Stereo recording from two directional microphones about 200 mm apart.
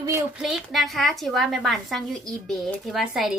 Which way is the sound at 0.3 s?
Centre (ahead or behind).